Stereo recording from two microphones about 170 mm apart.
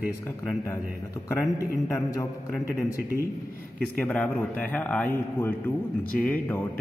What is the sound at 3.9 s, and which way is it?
A man's voice, 10° left (ahead or behind).